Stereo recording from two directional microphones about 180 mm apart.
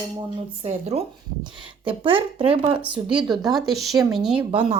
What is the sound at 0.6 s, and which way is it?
Speech, 35° right (ahead or behind).